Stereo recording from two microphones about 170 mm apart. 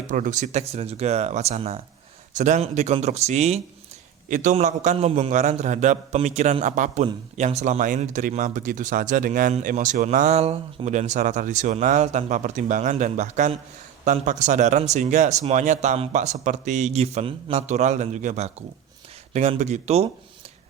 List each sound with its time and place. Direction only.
0.1 s a man's voice: 45° right (ahead or behind)